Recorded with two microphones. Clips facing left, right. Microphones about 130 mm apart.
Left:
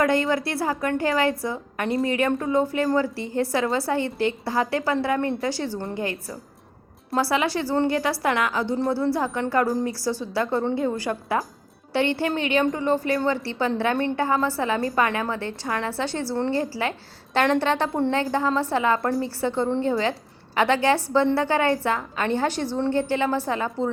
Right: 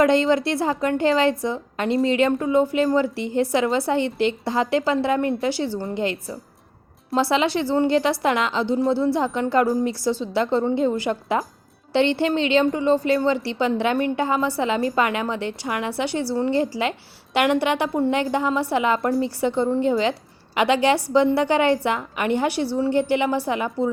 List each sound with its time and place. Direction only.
0.0 s a woman's voice: 20° right (ahead or behind)